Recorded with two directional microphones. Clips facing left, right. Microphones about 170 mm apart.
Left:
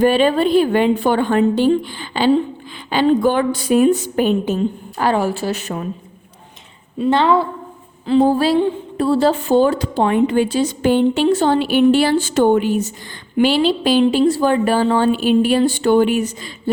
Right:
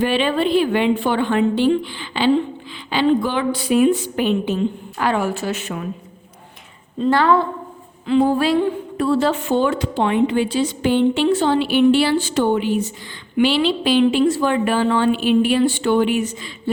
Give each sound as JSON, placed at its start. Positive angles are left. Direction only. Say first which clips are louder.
{"t": 0.0, "sound": "speech", "louder": "left 4 dB", "side_deg": 45}
{"t": 7.1, "sound": "a woman's voice", "louder": "left 1 dB", "side_deg": 20}
{"t": 8.0, "sound": "speech", "louder": "left 2 dB", "side_deg": 35}